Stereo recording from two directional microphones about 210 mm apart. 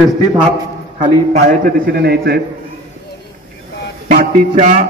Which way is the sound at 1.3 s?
45° right (ahead or behind).